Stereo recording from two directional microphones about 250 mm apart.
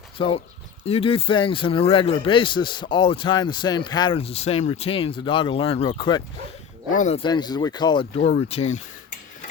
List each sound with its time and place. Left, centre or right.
0.2 s speech: centre